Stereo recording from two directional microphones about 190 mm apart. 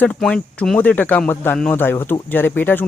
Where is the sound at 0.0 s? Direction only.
5° left (ahead or behind).